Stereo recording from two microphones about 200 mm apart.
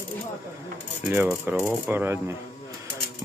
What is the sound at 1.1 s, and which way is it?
Speech, 10° right (ahead or behind).